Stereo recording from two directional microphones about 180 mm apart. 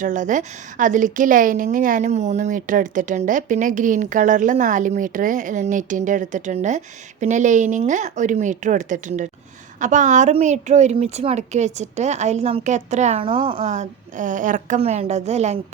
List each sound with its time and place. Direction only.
0.0 s a woman's voice: 45° right (ahead or behind)